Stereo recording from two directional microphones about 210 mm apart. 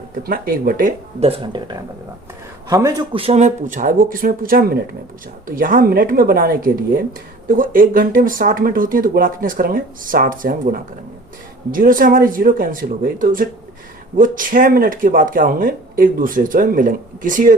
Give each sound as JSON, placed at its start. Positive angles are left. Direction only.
{"t": 0.2, "sound": "speech", "side_deg": -45}